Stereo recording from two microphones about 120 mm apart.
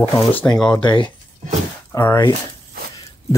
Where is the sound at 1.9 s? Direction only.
20° left (ahead or behind).